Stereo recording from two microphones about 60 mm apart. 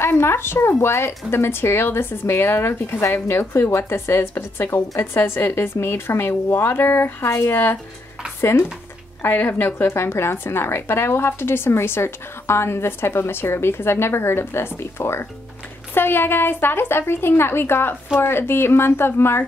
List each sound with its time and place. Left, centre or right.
0.0 s a woman's voice: left
9.2 s a woman's voice: left